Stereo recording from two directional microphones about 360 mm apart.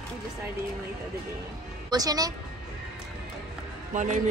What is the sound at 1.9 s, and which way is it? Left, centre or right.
Speech, centre.